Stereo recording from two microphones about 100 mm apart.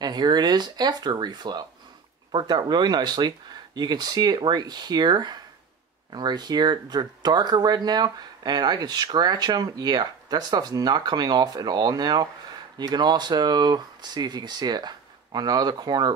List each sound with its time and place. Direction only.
0.0 s speech: 45° right (ahead or behind)